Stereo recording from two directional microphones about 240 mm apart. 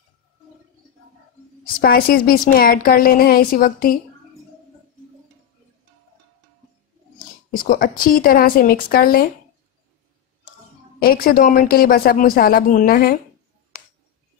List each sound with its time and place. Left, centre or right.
1.8 s a woman's voice: left
7.5 s a woman's voice: left
11.0 s a woman's voice: left